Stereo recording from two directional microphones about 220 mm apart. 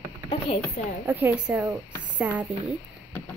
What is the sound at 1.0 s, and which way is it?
Speech, 10° right (ahead or behind).